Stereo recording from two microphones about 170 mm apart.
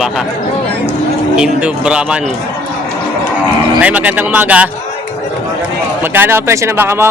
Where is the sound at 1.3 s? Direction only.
5° right (ahead or behind).